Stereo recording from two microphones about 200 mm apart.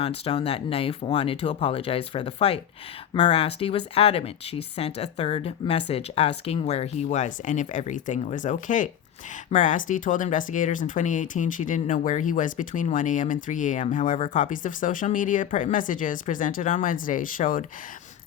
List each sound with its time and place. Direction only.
0.3 s speech: 30° left (ahead or behind)